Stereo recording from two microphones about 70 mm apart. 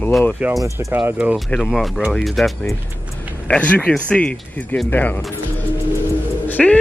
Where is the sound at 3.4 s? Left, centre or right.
Centre.